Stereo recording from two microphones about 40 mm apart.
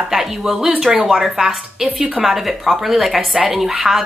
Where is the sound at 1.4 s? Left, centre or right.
Right.